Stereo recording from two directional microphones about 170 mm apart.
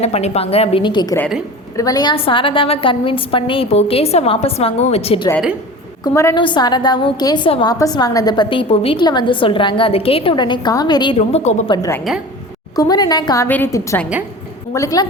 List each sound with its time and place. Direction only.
0.0 s a woman's voice: 35° left (ahead or behind)
6.1 s a woman's voice: 15° left (ahead or behind); by 11.6 s 40° left (ahead or behind)
11.7 s a woman's voice: 20° left (ahead or behind)